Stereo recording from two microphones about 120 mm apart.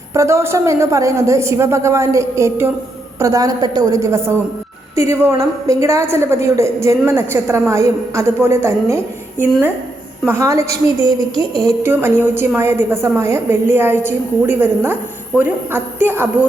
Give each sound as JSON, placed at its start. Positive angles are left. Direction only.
{"t": 0.1, "sound": "a woman's voice", "side_deg": -25}
{"t": 11.9, "sound": "a woman's voice", "side_deg": -15}